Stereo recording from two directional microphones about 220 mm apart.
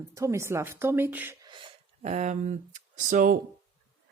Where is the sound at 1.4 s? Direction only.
20° right (ahead or behind); by 3.4 s 35° right (ahead or behind).